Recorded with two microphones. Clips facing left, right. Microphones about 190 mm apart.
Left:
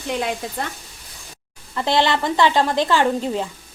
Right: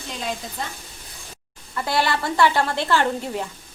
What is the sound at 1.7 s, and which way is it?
A woman's voice, 25° left (ahead or behind).